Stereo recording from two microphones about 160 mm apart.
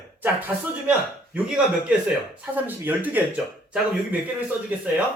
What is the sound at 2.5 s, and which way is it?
Speech, 10° right (ahead or behind).